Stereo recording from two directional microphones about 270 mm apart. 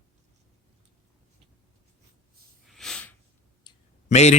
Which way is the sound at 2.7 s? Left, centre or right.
Centre.